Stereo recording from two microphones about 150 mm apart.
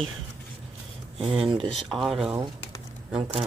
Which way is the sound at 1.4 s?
35° right (ahead or behind).